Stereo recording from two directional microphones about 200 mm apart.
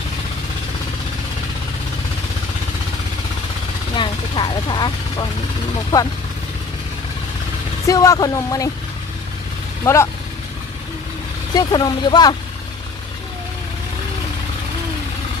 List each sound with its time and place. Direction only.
3.9 s vehicle: 25° left (ahead or behind)
7.9 s a woman's voice: 15° left (ahead or behind)
9.8 s a woman's voice: 15° left (ahead or behind)
11.5 s speech: 20° left (ahead or behind)